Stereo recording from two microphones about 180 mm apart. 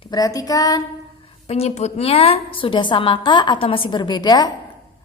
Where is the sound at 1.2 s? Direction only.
35° left (ahead or behind).